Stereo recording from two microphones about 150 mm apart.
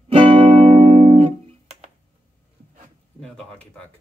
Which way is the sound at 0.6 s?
40° right (ahead or behind).